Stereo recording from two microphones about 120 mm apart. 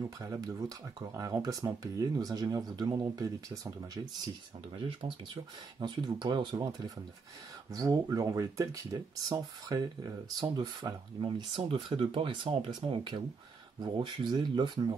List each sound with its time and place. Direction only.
0.2 s speech: 25° right (ahead or behind)
5.0 s speech: 40° right (ahead or behind)
7.7 s speech: 30° right (ahead or behind)